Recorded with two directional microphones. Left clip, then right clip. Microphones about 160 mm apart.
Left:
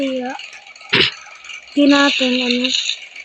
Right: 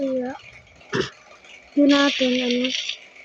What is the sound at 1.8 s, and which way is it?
Speech, 15° left (ahead or behind).